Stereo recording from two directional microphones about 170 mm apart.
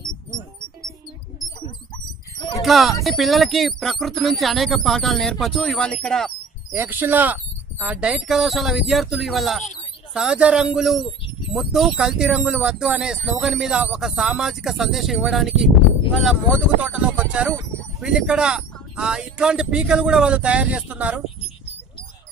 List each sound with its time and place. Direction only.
2.3 s a sound: 20° left (ahead or behind)
2.6 s speech: centre (ahead or behind)
6.7 s speech: 10° right (ahead or behind)